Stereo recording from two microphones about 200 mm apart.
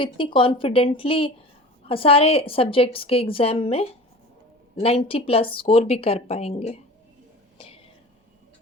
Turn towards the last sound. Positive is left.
turn(degrees=30)  # may be behind; listen again after turning